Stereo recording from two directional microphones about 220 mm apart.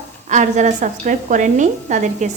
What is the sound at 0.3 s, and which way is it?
A woman's voice, 30° right (ahead or behind).